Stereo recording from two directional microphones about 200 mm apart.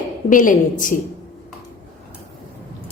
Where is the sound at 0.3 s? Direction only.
40° left (ahead or behind).